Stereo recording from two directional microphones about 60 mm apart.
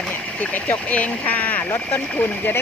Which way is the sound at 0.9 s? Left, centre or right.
Left.